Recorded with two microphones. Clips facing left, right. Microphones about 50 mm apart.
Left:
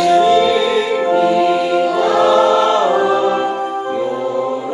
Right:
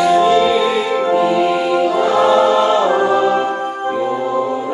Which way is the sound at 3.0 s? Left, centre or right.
Right.